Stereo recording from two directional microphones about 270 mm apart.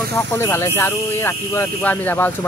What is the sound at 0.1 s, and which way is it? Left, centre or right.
Speech, centre.